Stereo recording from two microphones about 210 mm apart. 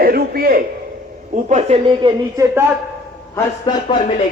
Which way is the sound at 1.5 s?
25° right (ahead or behind).